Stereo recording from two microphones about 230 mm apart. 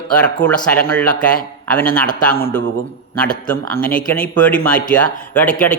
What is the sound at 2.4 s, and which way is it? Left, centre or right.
A man's voice, centre.